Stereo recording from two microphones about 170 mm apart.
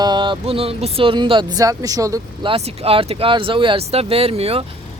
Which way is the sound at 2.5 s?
35° right (ahead or behind).